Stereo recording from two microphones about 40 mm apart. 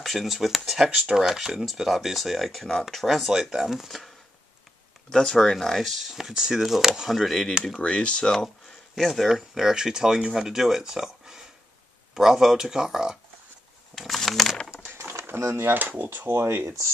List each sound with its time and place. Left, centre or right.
0.0 s speech: centre
5.1 s speech: centre
5.9 s speech: centre
7.8 s speech: left
8.9 s speech: centre
13.9 s speech: centre
15.2 s speech: right
15.8 s speech: right